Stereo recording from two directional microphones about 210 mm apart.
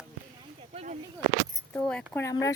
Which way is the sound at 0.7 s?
35° right (ahead or behind).